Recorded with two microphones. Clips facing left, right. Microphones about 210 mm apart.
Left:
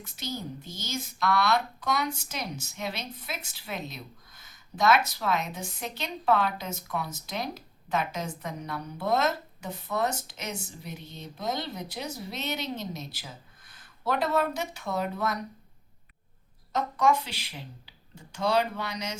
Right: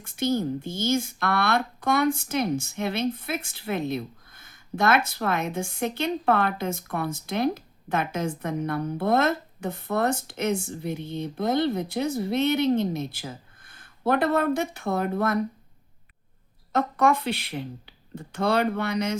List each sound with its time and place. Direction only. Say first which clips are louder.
0.0 s speech: right 11 dB; 55° right (ahead or behind)
16.7 s speech: right 3 dB; 55° right (ahead or behind)